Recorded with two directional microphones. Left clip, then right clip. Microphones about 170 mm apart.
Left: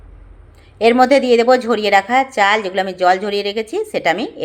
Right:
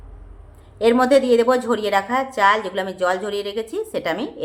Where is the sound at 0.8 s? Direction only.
15° left (ahead or behind).